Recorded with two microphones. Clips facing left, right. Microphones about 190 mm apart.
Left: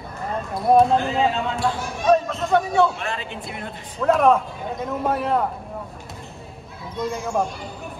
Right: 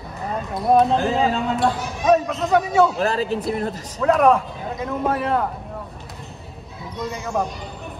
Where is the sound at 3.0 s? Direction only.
35° right (ahead or behind).